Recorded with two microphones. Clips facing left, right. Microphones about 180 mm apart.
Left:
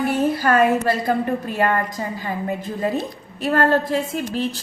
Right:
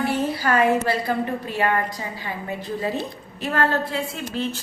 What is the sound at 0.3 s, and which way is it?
A woman's voice, 45° left (ahead or behind).